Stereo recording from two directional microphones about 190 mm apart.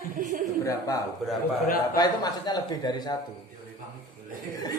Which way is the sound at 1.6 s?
50° left (ahead or behind).